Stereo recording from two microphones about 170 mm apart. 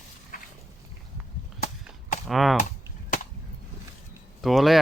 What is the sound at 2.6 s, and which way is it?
Cap gun, 50° left (ahead or behind).